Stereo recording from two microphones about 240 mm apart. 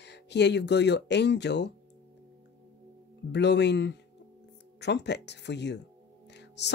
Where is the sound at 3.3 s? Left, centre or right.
Left.